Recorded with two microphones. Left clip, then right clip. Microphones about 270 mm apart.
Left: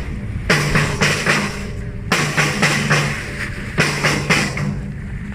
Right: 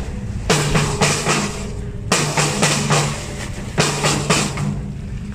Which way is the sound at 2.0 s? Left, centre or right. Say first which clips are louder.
Left 1 dB; centre.